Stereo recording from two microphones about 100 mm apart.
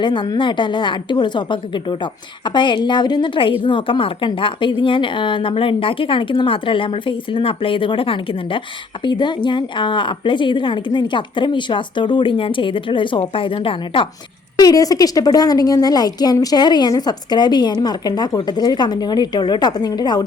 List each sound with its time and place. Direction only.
0.0 s a woman's voice: 50° left (ahead or behind)
9.0 s a woman's voice: 50° left (ahead or behind)
14.6 s a woman's voice: 40° left (ahead or behind)